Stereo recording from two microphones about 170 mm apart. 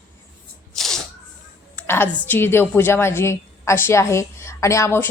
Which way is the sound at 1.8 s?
10° left (ahead or behind).